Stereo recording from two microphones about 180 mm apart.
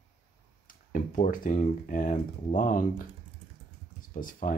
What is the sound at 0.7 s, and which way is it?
Speech, 50° left (ahead or behind).